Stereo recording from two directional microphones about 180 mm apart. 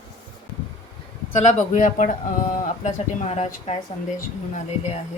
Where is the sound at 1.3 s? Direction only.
40° left (ahead or behind).